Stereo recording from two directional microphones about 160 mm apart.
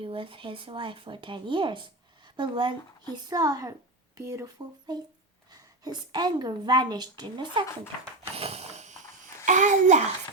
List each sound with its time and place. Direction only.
0.0 s a woman's voice: 35° right (ahead or behind)
8.4 s a sound: 40° right (ahead or behind)
9.5 s a child's voice: 50° right (ahead or behind)